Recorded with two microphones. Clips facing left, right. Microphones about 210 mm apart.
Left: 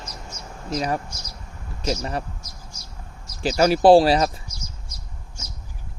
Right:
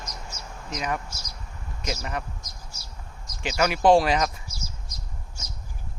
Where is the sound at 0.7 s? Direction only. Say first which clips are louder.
Left 5 dB; 35° left (ahead or behind).